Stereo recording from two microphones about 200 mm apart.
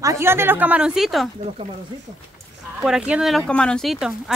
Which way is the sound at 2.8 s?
5° right (ahead or behind).